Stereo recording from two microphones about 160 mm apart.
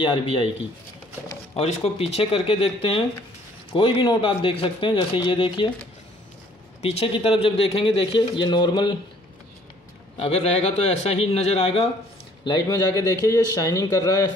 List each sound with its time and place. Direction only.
0.0 s a man's voice: 35° left (ahead or behind)
1.5 s a man's voice: 40° left (ahead or behind)
4.0 s a man's voice: 30° left (ahead or behind)
6.8 s a man's voice: 40° left (ahead or behind)
10.1 s a man's voice: 40° left (ahead or behind)
12.4 s a man's voice: 25° left (ahead or behind)